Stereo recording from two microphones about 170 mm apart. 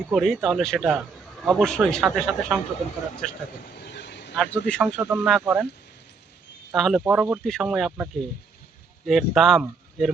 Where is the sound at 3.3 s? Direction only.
70° left (ahead or behind).